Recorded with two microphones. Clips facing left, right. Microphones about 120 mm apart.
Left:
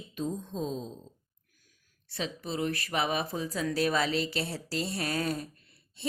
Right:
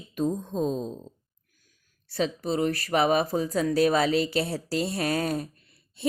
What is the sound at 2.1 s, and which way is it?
Speech, 40° right (ahead or behind).